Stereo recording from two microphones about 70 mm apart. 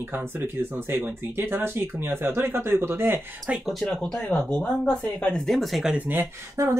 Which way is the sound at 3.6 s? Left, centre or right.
Centre.